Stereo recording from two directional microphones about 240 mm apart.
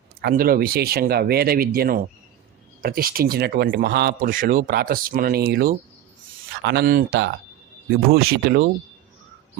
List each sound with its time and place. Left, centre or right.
0.2 s a man's voice: right